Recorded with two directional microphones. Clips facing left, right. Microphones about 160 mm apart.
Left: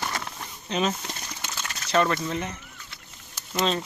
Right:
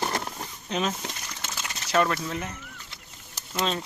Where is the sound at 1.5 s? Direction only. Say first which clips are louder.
Left 1 dB; 5° right (ahead or behind).